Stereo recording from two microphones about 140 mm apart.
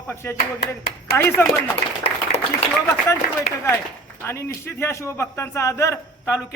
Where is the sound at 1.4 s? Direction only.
15° left (ahead or behind).